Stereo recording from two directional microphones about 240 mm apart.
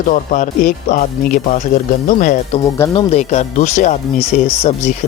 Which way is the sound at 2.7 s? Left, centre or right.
Centre.